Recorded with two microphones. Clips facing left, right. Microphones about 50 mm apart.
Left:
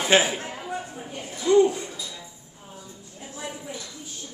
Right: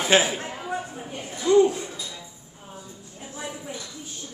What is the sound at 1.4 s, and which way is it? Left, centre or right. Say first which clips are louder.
Speech: even; centre.